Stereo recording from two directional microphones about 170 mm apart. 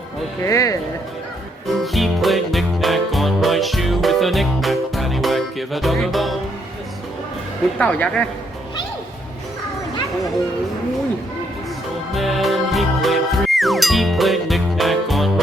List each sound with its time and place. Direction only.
0.4 s speech: 20° left (ahead or behind)
1.6 s music: centre (ahead or behind)
7.8 s speech: 5° left (ahead or behind)
12.1 s music: centre (ahead or behind)